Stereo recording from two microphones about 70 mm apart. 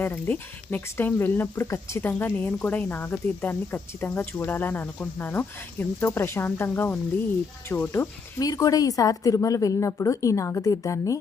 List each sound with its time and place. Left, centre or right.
0.0 s speech: left
8.4 s speech: left